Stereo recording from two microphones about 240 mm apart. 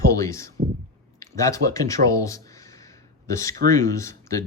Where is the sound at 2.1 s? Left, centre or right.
Centre.